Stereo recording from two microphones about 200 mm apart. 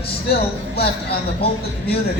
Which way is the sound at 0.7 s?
50° left (ahead or behind).